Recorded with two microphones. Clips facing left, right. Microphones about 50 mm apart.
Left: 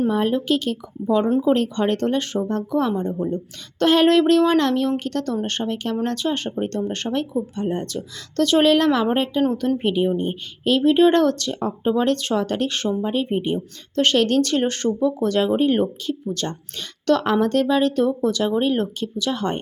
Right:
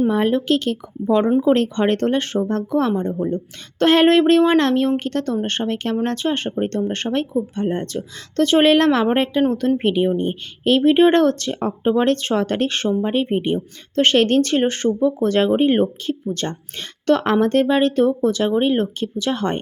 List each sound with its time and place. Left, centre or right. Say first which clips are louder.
0.1 s speech: right 2 dB; right
9.4 s speech: right 2 dB; right
13.9 s speech: right 3 dB; right